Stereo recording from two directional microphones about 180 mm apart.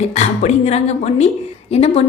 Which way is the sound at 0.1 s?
40° left (ahead or behind).